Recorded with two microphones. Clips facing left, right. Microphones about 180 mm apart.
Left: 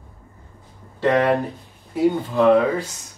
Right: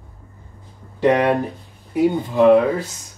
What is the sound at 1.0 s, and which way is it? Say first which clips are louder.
Speech: right 2 dB; 15° right (ahead or behind).